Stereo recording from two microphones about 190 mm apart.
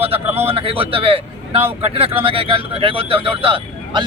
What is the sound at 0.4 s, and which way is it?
A man's voice, 30° right (ahead or behind).